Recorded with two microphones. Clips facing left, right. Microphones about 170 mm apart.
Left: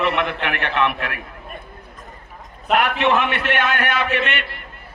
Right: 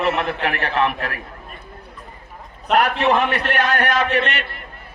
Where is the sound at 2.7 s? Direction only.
40° right (ahead or behind).